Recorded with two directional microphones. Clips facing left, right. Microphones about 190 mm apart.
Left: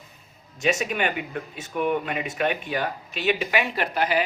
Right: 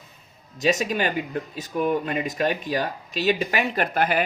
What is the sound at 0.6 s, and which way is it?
Speech, 35° right (ahead or behind).